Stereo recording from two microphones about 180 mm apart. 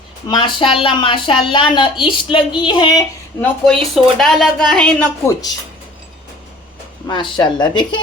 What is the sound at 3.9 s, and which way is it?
A woman's voice, centre (ahead or behind).